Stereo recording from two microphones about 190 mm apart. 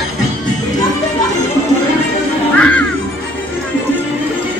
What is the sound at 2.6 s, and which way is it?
Music, 5° left (ahead or behind).